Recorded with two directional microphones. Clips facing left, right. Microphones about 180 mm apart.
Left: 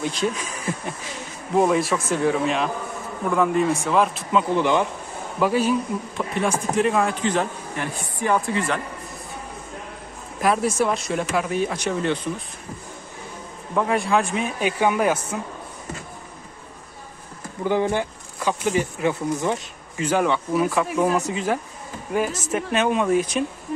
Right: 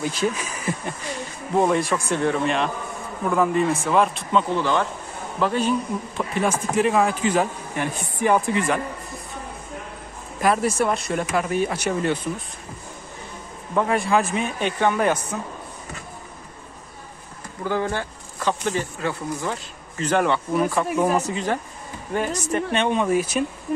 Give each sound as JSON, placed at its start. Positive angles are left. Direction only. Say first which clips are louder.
{"t": 0.0, "sound": "speech", "louder": "even", "side_deg": -5}
{"t": 4.6, "sound": "speech", "louder": "left 2 dB", "side_deg": 15}
{"t": 7.8, "sound": "speech", "louder": "right 4 dB", "side_deg": -15}
{"t": 10.4, "sound": "speech", "louder": "even", "side_deg": 0}
{"t": 13.7, "sound": "speech", "louder": "even", "side_deg": 0}
{"t": 17.6, "sound": "speech", "louder": "left 3 dB", "side_deg": 20}
{"t": 20.1, "sound": "speech", "louder": "even", "side_deg": 5}